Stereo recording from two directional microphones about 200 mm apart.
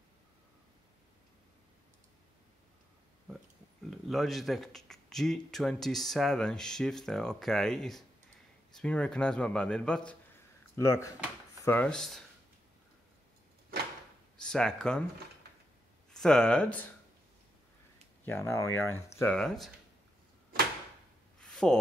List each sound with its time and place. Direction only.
4.1 s speech: centre (ahead or behind)
10.8 s speech: 15° left (ahead or behind)
14.3 s speech: 5° left (ahead or behind)
16.1 s speech: 5° left (ahead or behind)
18.2 s speech: 10° left (ahead or behind)
21.4 s a sound: 5° left (ahead or behind)